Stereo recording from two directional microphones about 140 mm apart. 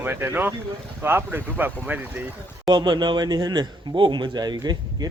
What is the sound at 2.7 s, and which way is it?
Speech, 35° right (ahead or behind).